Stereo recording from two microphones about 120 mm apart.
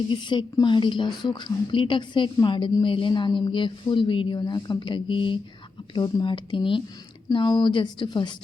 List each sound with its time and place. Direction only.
0.1 s a woman's voice: 40° left (ahead or behind)